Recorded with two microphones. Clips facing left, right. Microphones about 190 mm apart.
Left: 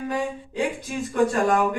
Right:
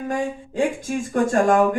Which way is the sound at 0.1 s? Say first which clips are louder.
Right 2 dB; 45° right (ahead or behind).